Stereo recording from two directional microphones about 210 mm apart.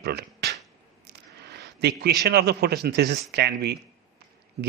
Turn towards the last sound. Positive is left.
turn(degrees=-50)  # may be behind; listen again after turning